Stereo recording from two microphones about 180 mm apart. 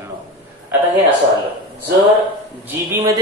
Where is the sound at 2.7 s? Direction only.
15° right (ahead or behind).